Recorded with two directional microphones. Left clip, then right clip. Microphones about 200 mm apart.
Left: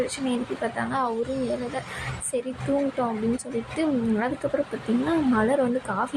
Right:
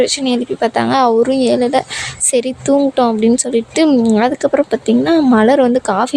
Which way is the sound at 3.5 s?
60° right (ahead or behind).